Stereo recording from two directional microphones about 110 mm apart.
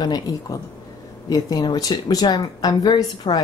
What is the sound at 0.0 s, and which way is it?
A woman's voice, 40° left (ahead or behind).